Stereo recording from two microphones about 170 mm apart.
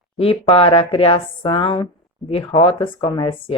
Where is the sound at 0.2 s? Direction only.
35° left (ahead or behind).